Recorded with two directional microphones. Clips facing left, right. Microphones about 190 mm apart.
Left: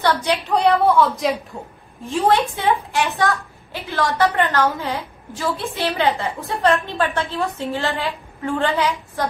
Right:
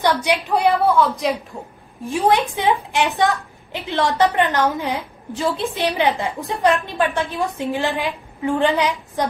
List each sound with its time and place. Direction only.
0.0 s a woman's voice: 15° right (ahead or behind)
0.9 s a woman's voice: centre (ahead or behind)
2.0 s a woman's voice: 15° right (ahead or behind)